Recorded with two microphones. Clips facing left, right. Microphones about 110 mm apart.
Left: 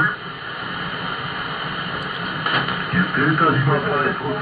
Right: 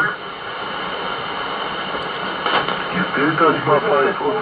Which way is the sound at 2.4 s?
45° right (ahead or behind).